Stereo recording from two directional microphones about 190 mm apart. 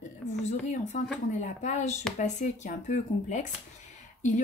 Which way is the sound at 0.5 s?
40° left (ahead or behind).